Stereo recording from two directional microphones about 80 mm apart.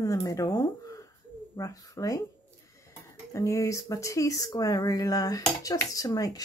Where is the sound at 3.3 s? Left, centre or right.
Left.